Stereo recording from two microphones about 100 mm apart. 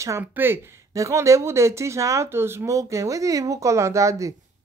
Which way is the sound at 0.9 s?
30° right (ahead or behind).